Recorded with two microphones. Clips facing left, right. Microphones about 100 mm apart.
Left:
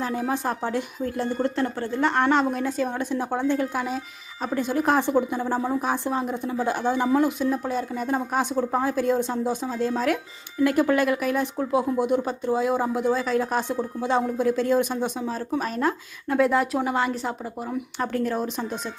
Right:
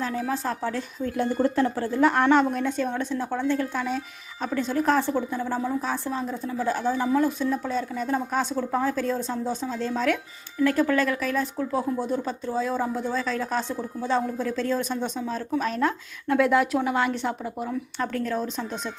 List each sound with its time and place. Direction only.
0.0 s speech: 15° left (ahead or behind)
1.1 s a woman's voice: centre (ahead or behind)
18.0 s speech: 10° left (ahead or behind)